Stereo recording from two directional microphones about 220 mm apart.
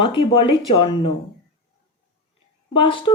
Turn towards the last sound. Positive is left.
turn(degrees=25)  # may be behind; listen again after turning